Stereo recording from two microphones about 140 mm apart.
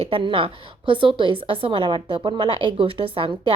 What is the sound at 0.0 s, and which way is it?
A woman's voice, 40° right (ahead or behind).